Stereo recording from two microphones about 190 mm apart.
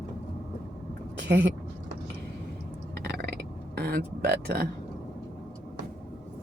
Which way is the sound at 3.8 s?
55° right (ahead or behind).